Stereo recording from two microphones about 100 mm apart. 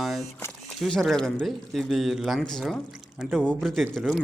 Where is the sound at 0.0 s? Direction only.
Centre (ahead or behind).